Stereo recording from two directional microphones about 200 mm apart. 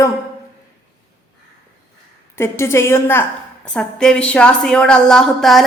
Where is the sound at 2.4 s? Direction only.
15° left (ahead or behind).